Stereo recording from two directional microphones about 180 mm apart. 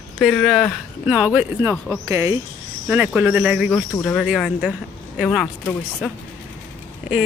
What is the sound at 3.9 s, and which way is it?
Speech, 10° left (ahead or behind).